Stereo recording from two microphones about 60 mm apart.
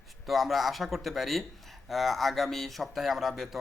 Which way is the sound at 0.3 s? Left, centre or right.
Centre.